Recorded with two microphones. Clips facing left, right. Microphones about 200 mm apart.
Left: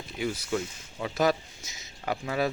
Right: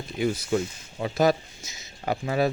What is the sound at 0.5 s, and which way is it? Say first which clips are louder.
Speech: right 5 dB; 35° right (ahead or behind).